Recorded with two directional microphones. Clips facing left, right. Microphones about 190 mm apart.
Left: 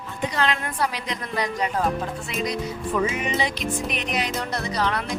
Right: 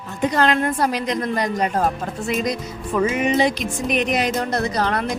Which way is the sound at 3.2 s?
45° right (ahead or behind).